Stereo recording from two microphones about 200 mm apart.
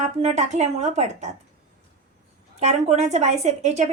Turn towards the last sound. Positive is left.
turn(degrees=-35)  # may be behind; listen again after turning